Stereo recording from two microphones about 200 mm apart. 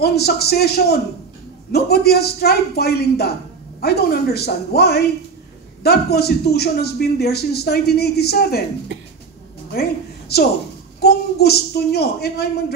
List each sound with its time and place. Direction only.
0.0 s a man's voice: 55° left (ahead or behind)
8.9 s cough: 60° right (ahead or behind)
9.7 s a sound: 50° left (ahead or behind)
11.0 s a man's voice: 55° left (ahead or behind)